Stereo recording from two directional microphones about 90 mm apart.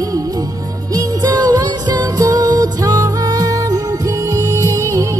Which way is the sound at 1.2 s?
45° right (ahead or behind).